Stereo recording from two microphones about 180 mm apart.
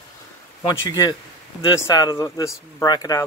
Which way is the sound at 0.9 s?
20° left (ahead or behind).